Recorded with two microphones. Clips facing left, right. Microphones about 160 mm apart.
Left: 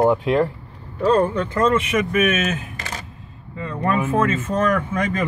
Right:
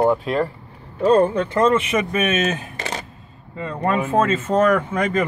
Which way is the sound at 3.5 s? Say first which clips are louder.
Even; 30° right (ahead or behind).